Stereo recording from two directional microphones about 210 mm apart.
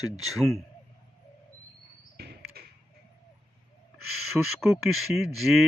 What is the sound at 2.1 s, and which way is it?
Basketball bounce, 50° right (ahead or behind).